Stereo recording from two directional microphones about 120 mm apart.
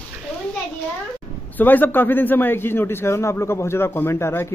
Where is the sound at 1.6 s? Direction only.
15° left (ahead or behind).